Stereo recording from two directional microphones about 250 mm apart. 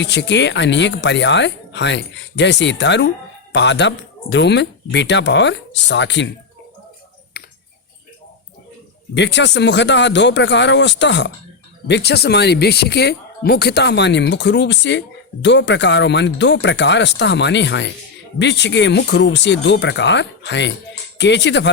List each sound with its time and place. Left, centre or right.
0.0 s speech: left
7.3 s a sound: left
9.1 s speech: left